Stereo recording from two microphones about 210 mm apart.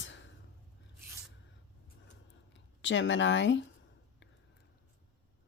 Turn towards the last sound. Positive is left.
turn(degrees=60)  # may be behind; listen again after turning